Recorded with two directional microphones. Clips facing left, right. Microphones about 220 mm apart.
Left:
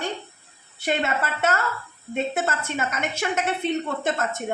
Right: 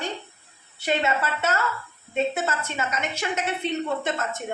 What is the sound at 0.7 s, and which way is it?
A woman's voice, 50° left (ahead or behind).